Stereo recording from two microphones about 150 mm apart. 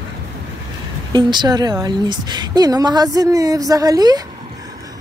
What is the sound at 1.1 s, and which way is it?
A woman's voice, 30° right (ahead or behind).